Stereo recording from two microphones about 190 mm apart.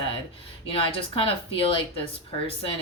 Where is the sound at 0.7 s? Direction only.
30° left (ahead or behind).